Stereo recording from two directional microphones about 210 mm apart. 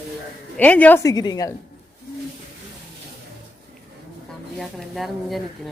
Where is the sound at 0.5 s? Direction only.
5° left (ahead or behind).